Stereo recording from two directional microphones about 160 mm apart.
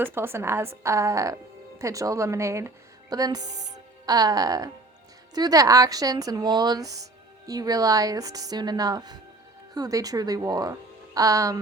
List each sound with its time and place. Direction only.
0.0 s a woman's voice: 15° right (ahead or behind)